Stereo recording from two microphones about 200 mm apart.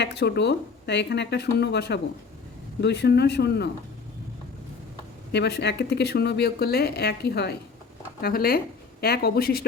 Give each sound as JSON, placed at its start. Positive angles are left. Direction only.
{"t": 0.0, "sound": "speech", "side_deg": 55}
{"t": 5.3, "sound": "speech", "side_deg": 55}